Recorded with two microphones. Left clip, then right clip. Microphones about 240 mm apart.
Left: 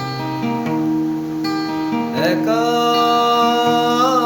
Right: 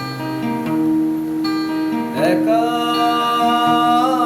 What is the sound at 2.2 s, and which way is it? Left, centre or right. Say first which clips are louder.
Music: right 2 dB; left.